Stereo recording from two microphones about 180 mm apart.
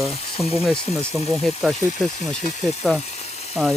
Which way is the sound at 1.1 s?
Centre (ahead or behind).